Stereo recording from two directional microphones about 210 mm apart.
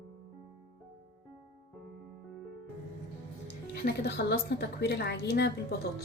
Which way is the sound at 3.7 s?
50° left (ahead or behind).